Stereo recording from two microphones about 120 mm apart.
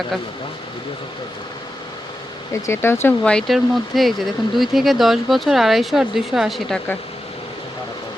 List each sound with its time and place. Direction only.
2.5 s speech: 20° left (ahead or behind)
3.2 s speech: 5° left (ahead or behind)